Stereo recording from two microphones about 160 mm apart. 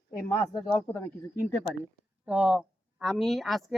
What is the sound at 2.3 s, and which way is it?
A woman's voice, 5° right (ahead or behind).